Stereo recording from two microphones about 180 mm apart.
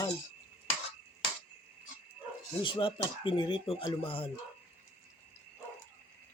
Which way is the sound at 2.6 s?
30° left (ahead or behind).